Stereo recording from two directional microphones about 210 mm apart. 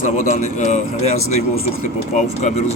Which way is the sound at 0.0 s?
35° left (ahead or behind).